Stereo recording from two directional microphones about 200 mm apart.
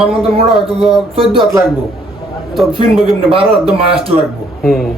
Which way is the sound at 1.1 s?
25° right (ahead or behind).